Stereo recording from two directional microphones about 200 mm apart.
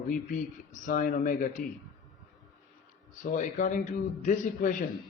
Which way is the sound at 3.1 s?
40° left (ahead or behind).